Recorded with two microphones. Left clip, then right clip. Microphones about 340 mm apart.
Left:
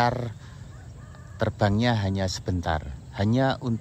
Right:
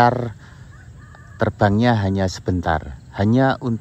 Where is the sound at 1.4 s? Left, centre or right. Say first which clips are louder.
Right 7 dB; centre.